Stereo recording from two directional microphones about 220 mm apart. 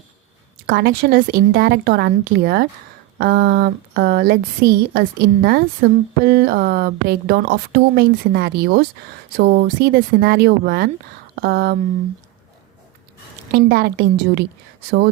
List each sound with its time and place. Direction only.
0.7 s a woman's voice: 45° right (ahead or behind)
13.5 s a woman's voice: 45° right (ahead or behind)